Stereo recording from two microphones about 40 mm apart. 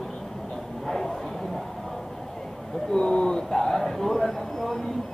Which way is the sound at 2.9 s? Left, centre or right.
Centre.